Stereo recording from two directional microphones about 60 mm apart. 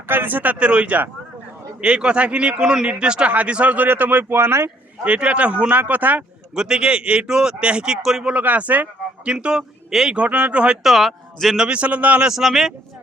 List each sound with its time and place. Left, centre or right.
0.1 s a man's voice: right
5.0 s a man's voice: right
6.5 s a man's voice: centre
8.3 s a man's voice: right; by 10.2 s centre
10.2 s a man's voice: right
10.8 s speech: centre
11.5 s a man's voice: centre
12.3 s speech: centre